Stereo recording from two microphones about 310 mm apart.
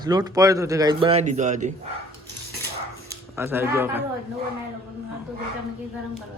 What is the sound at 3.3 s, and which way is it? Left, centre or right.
Speech, centre.